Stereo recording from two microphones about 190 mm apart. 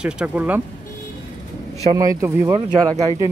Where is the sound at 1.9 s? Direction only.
20° right (ahead or behind).